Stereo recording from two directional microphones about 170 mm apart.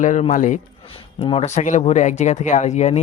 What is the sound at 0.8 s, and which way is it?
Speech, 35° left (ahead or behind).